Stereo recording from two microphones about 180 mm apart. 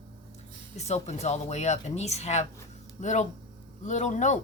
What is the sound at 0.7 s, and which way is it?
Speech, 35° left (ahead or behind).